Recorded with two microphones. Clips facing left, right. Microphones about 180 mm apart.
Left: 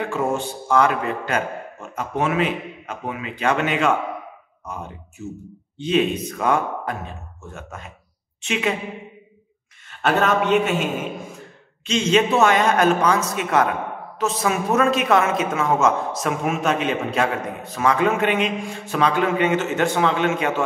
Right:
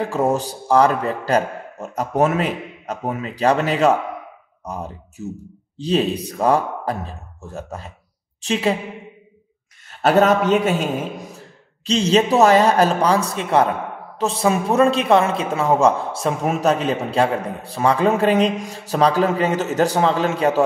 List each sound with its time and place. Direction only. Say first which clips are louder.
0.0 s a man's voice: right 3 dB; 35° right (ahead or behind)
9.8 s a man's voice: right 5 dB; 40° right (ahead or behind)